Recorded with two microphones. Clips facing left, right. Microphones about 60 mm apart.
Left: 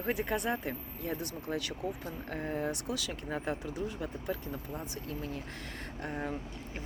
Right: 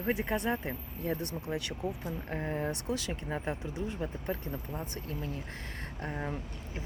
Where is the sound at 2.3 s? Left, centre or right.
Right.